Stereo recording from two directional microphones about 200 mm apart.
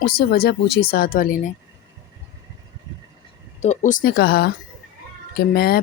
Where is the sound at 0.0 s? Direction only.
50° left (ahead or behind).